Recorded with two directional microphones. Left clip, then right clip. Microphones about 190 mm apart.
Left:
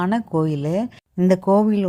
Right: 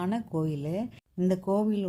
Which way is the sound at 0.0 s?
20° left (ahead or behind).